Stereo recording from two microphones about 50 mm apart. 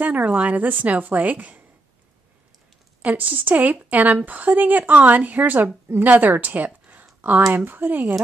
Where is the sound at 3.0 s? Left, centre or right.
Right.